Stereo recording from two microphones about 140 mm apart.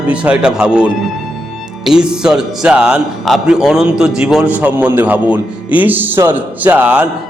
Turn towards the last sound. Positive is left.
turn(degrees=-10)  # may be behind; listen again after turning